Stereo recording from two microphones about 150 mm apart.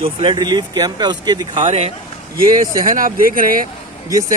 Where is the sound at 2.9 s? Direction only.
65° right (ahead or behind).